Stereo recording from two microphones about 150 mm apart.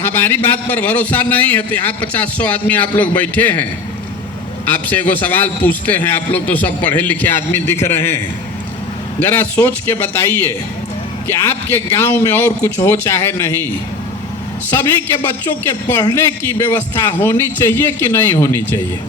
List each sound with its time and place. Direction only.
0.0 s a man's voice: 10° left (ahead or behind)
9.2 s a man's voice: 10° left (ahead or behind)
14.8 s a man's voice: 15° left (ahead or behind)